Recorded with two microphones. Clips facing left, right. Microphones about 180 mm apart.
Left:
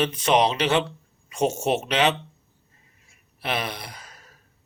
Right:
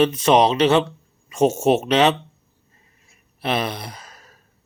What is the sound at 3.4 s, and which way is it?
Speech, 25° right (ahead or behind).